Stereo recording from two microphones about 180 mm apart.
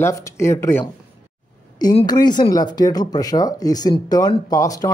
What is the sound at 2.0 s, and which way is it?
Speech, 25° left (ahead or behind).